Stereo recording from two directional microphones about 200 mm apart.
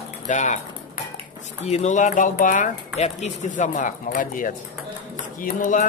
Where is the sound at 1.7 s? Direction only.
35° left (ahead or behind).